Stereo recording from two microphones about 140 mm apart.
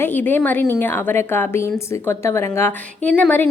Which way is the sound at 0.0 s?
15° left (ahead or behind).